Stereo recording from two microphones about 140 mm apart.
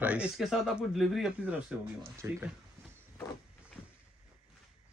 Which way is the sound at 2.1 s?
20° right (ahead or behind).